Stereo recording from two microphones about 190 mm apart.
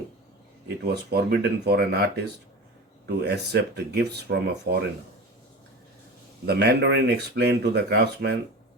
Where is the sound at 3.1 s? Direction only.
60° right (ahead or behind).